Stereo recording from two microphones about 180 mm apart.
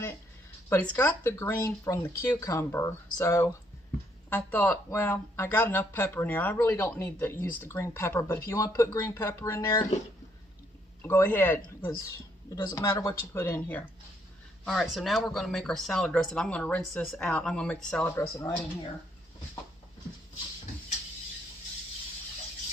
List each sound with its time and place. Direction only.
0.7 s speech: 10° left (ahead or behind)
11.0 s speech: 10° left (ahead or behind)